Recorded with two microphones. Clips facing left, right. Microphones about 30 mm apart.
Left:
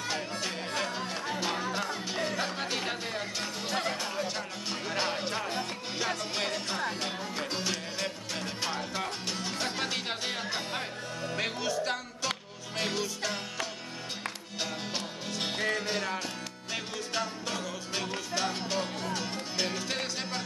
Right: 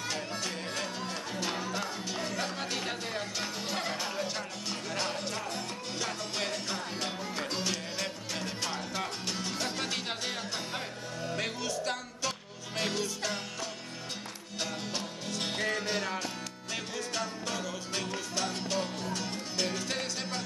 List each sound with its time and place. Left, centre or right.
0.0 s music: centre
4.8 s music: centre
14.6 s music: centre